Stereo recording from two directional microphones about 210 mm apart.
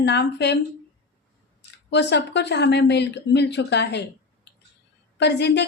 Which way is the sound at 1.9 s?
55° left (ahead or behind).